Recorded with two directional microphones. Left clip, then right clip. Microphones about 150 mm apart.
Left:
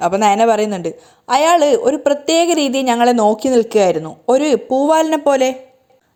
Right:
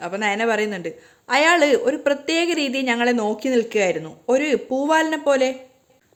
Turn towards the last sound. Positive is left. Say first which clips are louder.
# left 5 dB
turn(degrees=40)  # may be behind; listen again after turning